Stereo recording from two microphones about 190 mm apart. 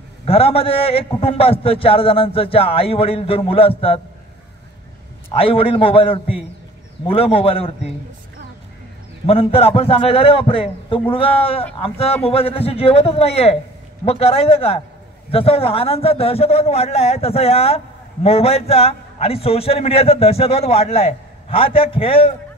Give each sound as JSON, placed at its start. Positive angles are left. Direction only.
{"t": 0.2, "sound": "a man's voice", "side_deg": 30}
{"t": 5.3, "sound": "a man's voice", "side_deg": 30}
{"t": 9.2, "sound": "a man's voice", "side_deg": 30}